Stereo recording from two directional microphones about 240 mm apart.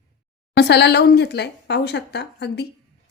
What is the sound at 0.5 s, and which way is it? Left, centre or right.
Speech, left.